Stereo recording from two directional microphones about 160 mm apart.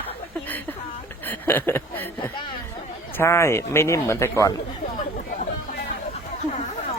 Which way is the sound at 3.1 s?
15° left (ahead or behind).